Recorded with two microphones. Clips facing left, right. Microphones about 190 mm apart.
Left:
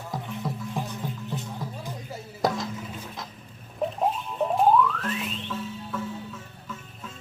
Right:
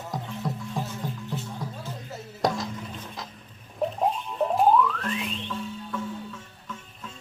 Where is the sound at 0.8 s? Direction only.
15° left (ahead or behind).